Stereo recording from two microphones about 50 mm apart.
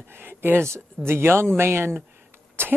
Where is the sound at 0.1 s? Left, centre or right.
Right.